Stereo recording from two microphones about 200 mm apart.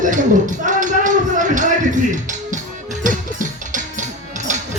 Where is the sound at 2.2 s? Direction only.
40° right (ahead or behind).